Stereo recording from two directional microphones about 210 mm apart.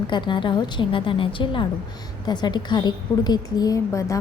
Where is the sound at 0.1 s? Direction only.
20° left (ahead or behind).